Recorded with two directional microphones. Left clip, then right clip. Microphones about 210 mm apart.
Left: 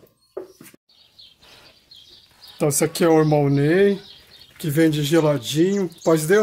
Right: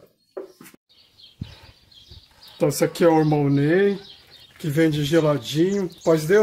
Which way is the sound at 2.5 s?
25° left (ahead or behind).